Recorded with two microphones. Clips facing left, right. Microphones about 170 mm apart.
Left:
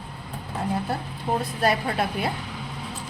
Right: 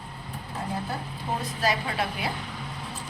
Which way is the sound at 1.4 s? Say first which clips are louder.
Left 3 dB; 60° left (ahead or behind).